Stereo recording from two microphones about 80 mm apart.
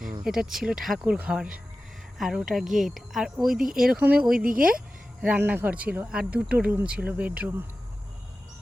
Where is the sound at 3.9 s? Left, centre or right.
Centre.